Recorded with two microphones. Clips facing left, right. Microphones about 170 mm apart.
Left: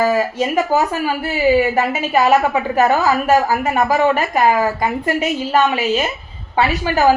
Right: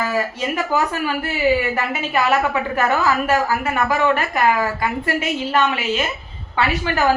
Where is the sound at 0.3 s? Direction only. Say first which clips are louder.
Left 5 dB; 40° left (ahead or behind).